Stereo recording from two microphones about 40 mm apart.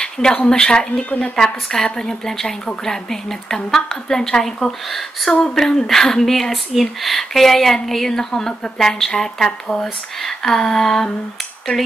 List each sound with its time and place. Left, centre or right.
0.0 s speech: left